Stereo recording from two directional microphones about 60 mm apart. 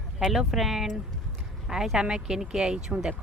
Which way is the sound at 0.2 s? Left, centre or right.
Centre.